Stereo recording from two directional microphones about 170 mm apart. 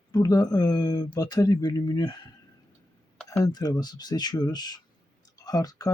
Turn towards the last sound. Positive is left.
turn(degrees=20)  # may be behind; listen again after turning